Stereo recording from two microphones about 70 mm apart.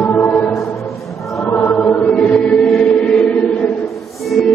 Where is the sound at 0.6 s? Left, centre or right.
Left.